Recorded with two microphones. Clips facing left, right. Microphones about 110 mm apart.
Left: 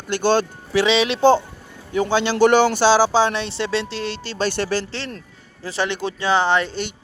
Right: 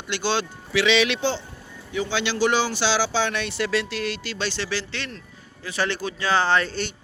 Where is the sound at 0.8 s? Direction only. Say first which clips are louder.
Left 1 dB; 30° left (ahead or behind).